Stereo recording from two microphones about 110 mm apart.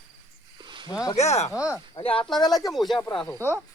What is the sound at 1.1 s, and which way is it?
Speech, 85° left.